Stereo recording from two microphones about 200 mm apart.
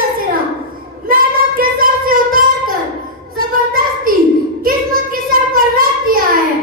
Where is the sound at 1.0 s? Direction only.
45° right (ahead or behind).